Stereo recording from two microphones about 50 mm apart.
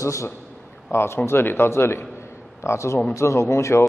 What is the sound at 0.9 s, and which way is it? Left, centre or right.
A man's voice, left.